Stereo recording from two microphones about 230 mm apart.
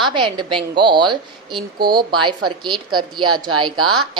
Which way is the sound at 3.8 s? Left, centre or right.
Right.